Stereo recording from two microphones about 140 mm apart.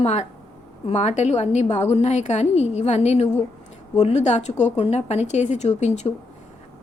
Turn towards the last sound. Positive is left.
turn(degrees=55)  # may be behind; listen again after turning